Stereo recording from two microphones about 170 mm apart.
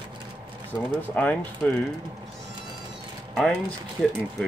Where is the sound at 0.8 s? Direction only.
10° left (ahead or behind).